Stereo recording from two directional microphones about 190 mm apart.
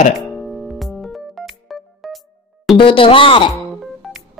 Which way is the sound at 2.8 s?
25° left (ahead or behind).